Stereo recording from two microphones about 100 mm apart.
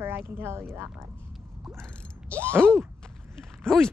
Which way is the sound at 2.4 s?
20° right (ahead or behind).